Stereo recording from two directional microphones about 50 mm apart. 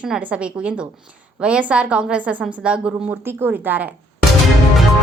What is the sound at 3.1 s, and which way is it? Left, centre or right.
Speech, right.